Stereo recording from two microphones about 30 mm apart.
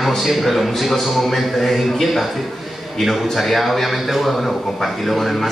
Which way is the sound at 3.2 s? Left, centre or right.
Centre.